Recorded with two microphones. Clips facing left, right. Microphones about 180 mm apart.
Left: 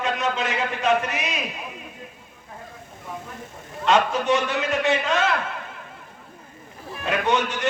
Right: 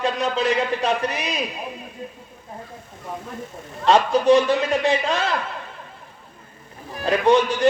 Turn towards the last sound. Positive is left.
turn(degrees=-35)  # may be behind; listen again after turning